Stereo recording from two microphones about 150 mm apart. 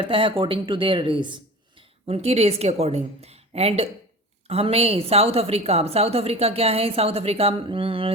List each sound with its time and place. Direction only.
0.0 s a woman's voice: 35° right (ahead or behind)